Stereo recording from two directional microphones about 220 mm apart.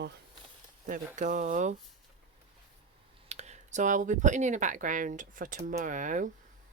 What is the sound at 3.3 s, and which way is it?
Speech, 30° right (ahead or behind).